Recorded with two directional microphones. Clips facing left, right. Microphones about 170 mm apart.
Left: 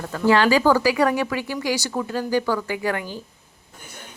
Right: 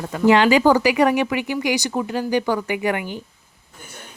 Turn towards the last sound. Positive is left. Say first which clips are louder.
# right 3 dB
turn(degrees=-20)  # may be behind; listen again after turning